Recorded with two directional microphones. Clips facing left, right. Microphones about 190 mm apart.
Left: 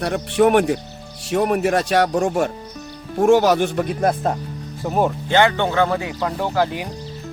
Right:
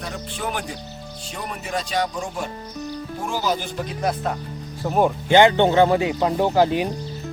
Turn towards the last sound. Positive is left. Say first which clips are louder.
# right 3 dB
turn(degrees=-20)  # may be behind; listen again after turning